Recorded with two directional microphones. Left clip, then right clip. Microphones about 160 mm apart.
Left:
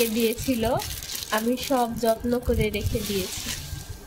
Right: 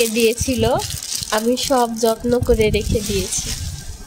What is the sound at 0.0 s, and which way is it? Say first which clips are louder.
A woman's voice: right 7 dB; 55° right (ahead or behind).